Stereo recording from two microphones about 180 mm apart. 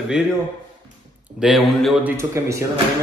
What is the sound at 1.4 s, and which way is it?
Speech, centre (ahead or behind).